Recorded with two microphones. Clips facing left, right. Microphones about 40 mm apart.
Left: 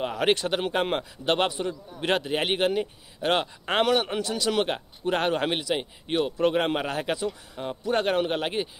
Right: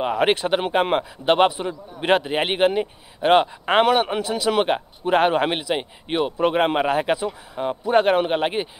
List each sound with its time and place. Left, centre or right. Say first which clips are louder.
0.0 s a man's voice: right 5 dB; right